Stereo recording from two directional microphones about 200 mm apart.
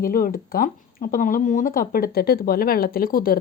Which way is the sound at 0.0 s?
45° left (ahead or behind).